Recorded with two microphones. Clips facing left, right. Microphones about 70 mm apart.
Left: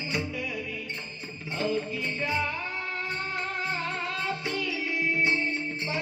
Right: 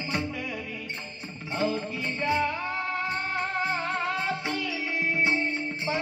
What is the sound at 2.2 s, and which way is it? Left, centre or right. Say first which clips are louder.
Music: right 4 dB; right.